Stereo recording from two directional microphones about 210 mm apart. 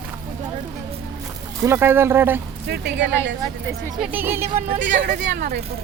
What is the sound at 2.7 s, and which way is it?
Speech, 55° right (ahead or behind).